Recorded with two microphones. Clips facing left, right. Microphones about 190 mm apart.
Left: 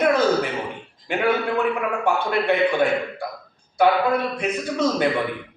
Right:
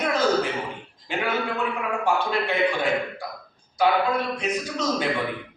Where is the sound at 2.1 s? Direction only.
60° left (ahead or behind).